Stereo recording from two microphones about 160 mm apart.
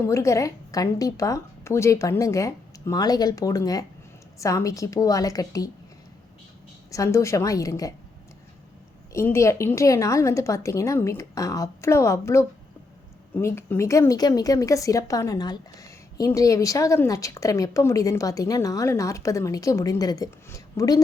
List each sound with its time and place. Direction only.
0.0 s a woman's voice: 20° left (ahead or behind)
6.9 s a woman's voice: 20° left (ahead or behind)
9.1 s a woman's voice: 15° left (ahead or behind)